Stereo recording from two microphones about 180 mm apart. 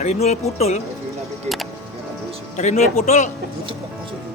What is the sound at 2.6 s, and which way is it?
Speech, 40° left (ahead or behind).